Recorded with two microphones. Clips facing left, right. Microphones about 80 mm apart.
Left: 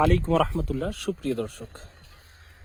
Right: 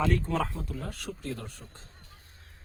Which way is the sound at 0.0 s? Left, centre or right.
Left.